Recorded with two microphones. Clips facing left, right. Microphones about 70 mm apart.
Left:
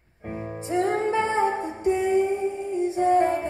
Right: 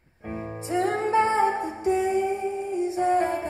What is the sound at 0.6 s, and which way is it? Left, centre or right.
Music, left.